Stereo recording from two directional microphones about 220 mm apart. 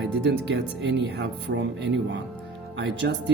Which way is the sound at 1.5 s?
55° right (ahead or behind).